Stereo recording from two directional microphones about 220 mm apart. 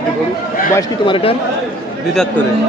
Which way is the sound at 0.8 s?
20° left (ahead or behind).